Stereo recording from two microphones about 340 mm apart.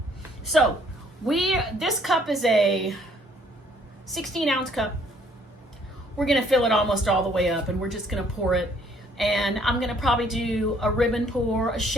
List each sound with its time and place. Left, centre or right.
0.5 s a woman's voice: centre
4.1 s a woman's voice: centre
6.1 s a woman's voice: centre